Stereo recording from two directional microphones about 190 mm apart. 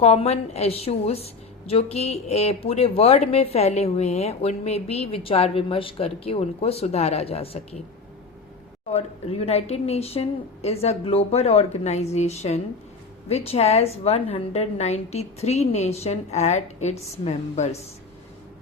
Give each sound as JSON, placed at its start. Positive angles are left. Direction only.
{"t": 0.0, "sound": "a woman's voice", "side_deg": 30}
{"t": 8.9, "sound": "a woman's voice", "side_deg": 35}